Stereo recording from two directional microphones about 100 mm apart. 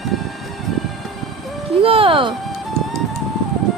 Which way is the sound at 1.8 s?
65° right (ahead or behind).